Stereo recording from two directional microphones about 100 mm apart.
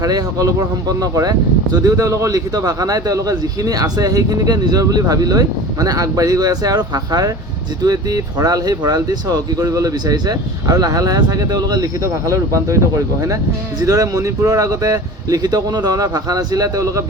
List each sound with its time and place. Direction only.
0.0 s speech: 35° right (ahead or behind)